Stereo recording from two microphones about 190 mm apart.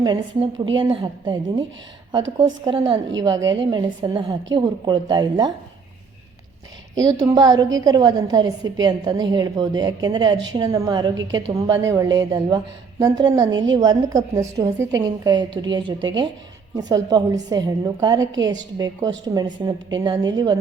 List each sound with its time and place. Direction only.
0.0 s a woman's voice: 25° right (ahead or behind)
6.9 s a woman's voice: 20° right (ahead or behind)